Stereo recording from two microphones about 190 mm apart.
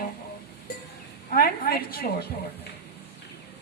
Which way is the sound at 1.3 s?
50° left (ahead or behind).